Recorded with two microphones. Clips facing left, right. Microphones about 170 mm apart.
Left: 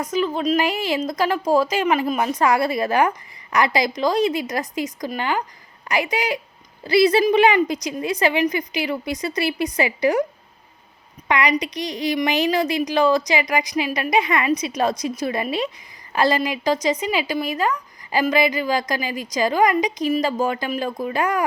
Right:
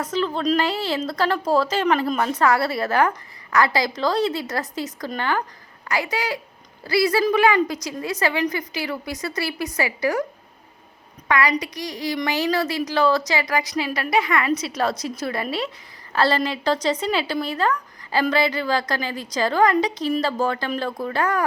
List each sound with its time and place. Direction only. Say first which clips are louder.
0.0 s a woman's voice: left 1 dB; 10° left (ahead or behind)
11.3 s a woman's voice: left 1 dB; 20° left (ahead or behind)